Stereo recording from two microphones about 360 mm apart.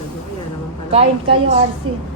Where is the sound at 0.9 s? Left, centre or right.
Centre.